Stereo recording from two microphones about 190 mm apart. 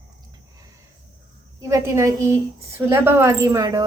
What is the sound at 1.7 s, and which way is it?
A woman's voice, 15° right (ahead or behind).